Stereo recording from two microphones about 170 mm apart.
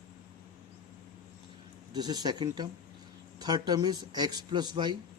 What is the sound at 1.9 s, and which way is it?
Speech, 25° right (ahead or behind).